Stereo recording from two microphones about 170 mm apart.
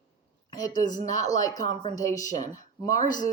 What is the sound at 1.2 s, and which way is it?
Speech, 20° left (ahead or behind).